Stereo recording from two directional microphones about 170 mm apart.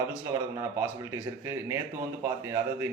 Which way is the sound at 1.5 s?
15° right (ahead or behind).